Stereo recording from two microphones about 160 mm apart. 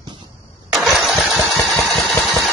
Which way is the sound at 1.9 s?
5° left (ahead or behind).